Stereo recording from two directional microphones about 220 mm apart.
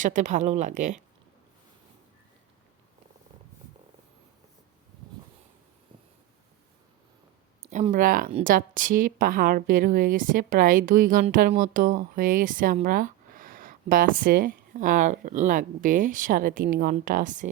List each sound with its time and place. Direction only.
0.0 s speech: 35° right (ahead or behind)
7.7 s speech: 35° right (ahead or behind)